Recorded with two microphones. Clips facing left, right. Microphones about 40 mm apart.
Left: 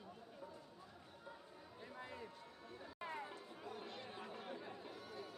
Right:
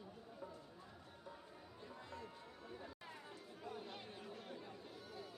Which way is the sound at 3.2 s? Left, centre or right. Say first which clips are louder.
Left 2 dB; centre.